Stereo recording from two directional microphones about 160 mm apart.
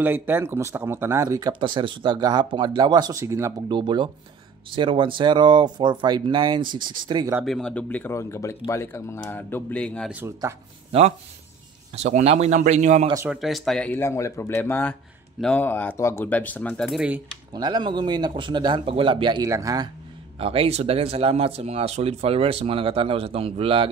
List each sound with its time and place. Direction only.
0.0 s speech: 10° right (ahead or behind)
1.5 s speech: 30° right (ahead or behind)
3.7 s speech: 30° right (ahead or behind)
7.4 s speech: 5° left (ahead or behind)
10.0 s speech: 15° right (ahead or behind)
10.9 s a man's voice: 40° right (ahead or behind)
13.3 s speech: centre (ahead or behind)
17.5 s speech: 25° right (ahead or behind)
20.3 s speech: 35° right (ahead or behind)